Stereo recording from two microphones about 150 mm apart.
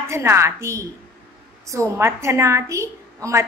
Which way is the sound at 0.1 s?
20° right (ahead or behind).